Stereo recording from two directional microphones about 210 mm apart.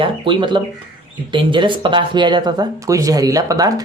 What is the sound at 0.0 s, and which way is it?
Speech, 25° right (ahead or behind).